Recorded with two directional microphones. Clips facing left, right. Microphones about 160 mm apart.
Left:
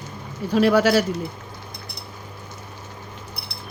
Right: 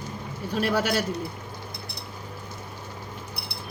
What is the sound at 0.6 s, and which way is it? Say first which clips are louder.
Speech: left 8 dB; 90° left.